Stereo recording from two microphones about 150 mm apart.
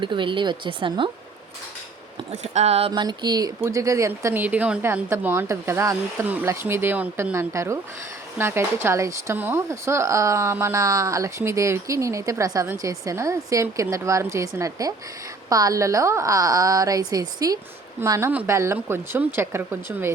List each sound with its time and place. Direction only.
0.0 s speech: 35° right (ahead or behind)
2.4 s speech: 50° right (ahead or behind)
2.9 s a woman's voice: 30° right (ahead or behind)